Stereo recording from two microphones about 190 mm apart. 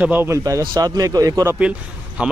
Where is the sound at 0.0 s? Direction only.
10° right (ahead or behind).